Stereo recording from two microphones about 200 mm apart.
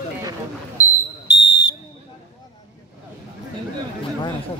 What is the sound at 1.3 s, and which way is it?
Smoke detector, 60° left (ahead or behind).